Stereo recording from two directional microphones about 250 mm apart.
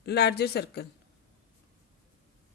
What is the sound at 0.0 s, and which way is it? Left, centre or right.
Speech, left.